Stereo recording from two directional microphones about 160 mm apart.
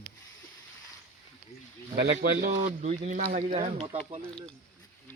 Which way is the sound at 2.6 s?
40° right (ahead or behind).